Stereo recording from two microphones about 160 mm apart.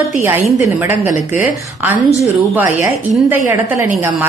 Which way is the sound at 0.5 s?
15° right (ahead or behind).